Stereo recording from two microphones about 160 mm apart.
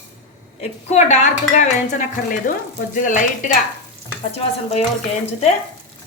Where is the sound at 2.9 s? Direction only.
55° left (ahead or behind).